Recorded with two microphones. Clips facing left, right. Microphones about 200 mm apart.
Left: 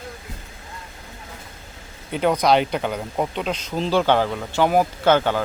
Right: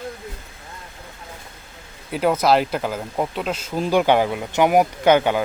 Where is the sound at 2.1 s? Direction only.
5° right (ahead or behind).